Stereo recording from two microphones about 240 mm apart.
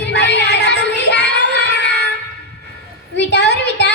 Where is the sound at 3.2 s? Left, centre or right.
Left.